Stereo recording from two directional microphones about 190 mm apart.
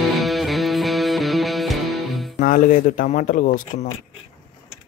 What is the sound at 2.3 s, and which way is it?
Speech, 45° left (ahead or behind).